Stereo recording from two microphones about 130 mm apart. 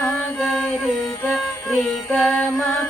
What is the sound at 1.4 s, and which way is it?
Music, 15° left (ahead or behind).